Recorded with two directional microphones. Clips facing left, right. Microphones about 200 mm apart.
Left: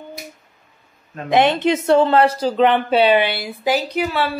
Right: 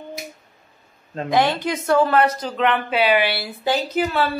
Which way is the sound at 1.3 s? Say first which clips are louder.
Left 4 dB; 20° left (ahead or behind).